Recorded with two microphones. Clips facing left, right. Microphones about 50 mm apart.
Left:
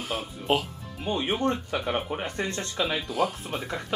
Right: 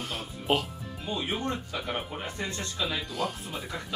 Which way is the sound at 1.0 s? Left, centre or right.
Left.